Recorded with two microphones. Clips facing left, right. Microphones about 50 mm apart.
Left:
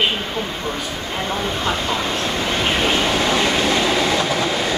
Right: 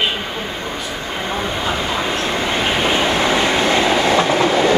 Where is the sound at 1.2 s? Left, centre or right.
Centre.